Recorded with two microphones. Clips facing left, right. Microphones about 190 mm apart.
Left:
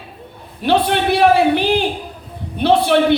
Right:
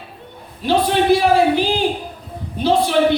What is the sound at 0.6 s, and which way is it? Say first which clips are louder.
A man's voice: even; 65° left (ahead or behind).